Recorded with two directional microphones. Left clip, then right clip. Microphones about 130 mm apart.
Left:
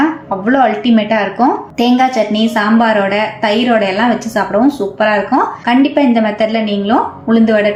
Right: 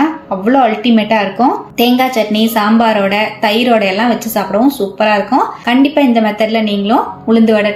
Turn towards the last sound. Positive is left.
turn(degrees=-20)  # may be behind; listen again after turning